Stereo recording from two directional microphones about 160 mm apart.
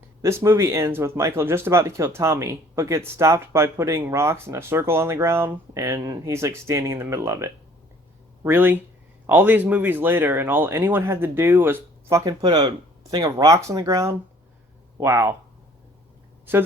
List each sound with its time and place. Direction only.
0.2 s speech: 15° right (ahead or behind)